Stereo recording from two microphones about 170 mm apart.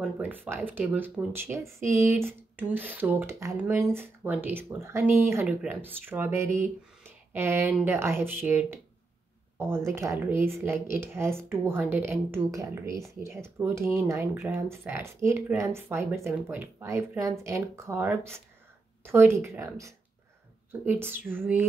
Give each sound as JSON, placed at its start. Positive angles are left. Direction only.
{"t": 0.0, "sound": "speech", "side_deg": -10}